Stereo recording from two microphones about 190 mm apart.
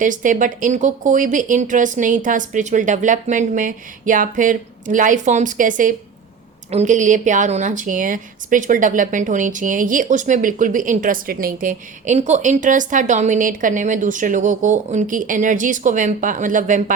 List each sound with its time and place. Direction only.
0.0 s a woman's voice: 45° right (ahead or behind)